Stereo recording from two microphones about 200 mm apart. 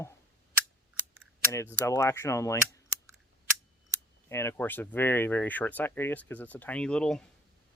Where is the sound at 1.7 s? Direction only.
15° left (ahead or behind).